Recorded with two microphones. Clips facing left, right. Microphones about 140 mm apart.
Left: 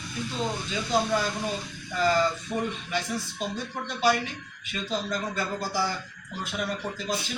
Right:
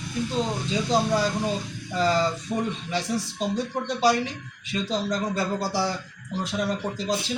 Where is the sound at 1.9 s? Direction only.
30° right (ahead or behind).